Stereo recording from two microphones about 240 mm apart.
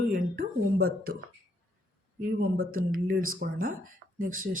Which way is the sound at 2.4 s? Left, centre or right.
Right.